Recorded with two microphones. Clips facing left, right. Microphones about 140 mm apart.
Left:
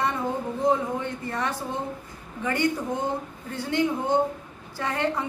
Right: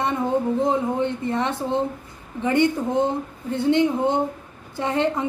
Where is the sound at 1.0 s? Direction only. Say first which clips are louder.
Right 6 dB; 25° right (ahead or behind).